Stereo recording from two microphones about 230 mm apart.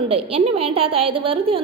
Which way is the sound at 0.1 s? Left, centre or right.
Right.